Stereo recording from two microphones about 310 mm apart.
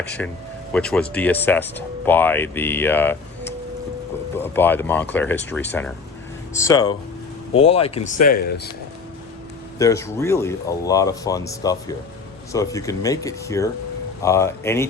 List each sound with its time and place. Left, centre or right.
0.2 s speech: centre; by 8.6 s left
9.7 s speech: centre